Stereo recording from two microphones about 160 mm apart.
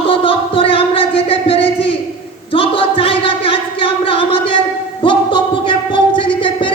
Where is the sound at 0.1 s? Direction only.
35° left (ahead or behind).